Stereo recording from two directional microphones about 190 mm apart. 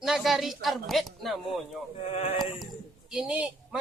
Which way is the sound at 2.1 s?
30° left (ahead or behind).